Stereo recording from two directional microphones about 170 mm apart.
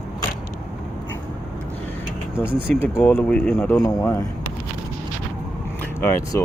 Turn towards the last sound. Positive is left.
turn(degrees=15)  # may be behind; listen again after turning